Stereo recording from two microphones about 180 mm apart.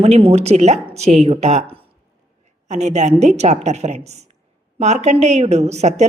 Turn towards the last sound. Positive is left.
turn(degrees=-40)  # may be behind; listen again after turning